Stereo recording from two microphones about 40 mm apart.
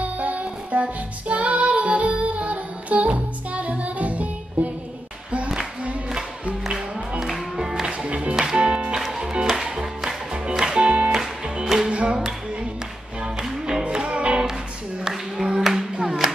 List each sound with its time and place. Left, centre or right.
0.0 s music: right
6.6 s music: centre
7.8 s music: right
8.4 s music: centre
10.8 s music: right
11.1 s music: centre
11.9 s music: right
13.4 s music: centre
13.9 s music: right
16.0 s music: centre